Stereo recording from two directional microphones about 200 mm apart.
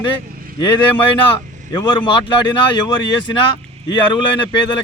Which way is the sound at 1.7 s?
20° left (ahead or behind).